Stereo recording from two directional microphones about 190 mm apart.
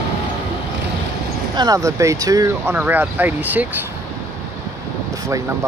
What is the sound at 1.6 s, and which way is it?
Speech, 15° right (ahead or behind).